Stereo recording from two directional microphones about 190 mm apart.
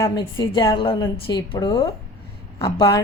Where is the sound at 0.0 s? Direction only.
20° left (ahead or behind).